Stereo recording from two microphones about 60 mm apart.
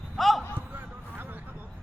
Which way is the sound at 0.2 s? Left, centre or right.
Centre.